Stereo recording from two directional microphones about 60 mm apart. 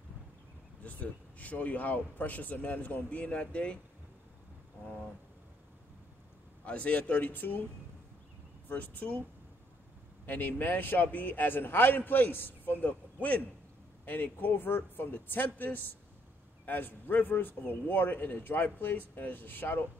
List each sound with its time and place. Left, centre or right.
0.8 s a man's voice: left
6.6 s a man's voice: left
8.6 s a man's voice: left
10.2 s a man's voice: left